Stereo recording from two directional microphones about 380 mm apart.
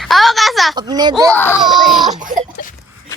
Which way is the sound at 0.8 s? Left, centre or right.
Centre.